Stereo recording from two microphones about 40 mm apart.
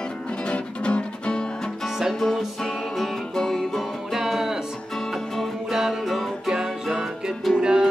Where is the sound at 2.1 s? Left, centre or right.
Centre.